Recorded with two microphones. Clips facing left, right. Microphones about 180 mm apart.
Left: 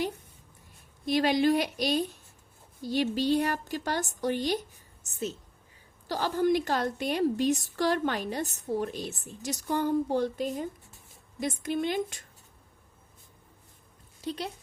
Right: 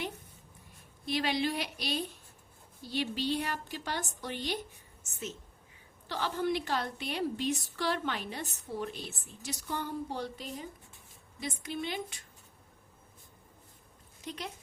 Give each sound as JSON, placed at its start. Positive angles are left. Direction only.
{"t": 1.0, "sound": "a woman's voice", "side_deg": 45}
{"t": 14.2, "sound": "a woman's voice", "side_deg": 35}